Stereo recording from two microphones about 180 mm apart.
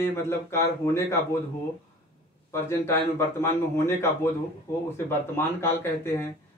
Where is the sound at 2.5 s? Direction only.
15° left (ahead or behind).